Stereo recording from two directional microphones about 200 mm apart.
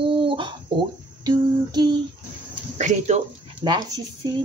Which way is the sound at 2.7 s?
35° right (ahead or behind).